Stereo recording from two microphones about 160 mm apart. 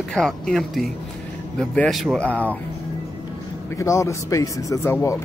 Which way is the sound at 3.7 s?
20° left (ahead or behind).